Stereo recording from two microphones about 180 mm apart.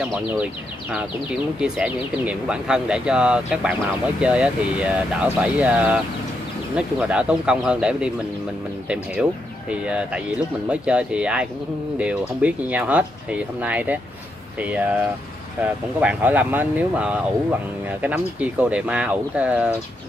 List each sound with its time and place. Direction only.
0.9 s speech: 5° right (ahead or behind)
16.0 s speech: 10° right (ahead or behind)